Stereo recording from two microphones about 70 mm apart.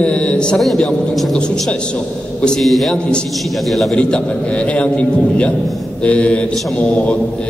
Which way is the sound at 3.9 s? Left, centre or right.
Centre.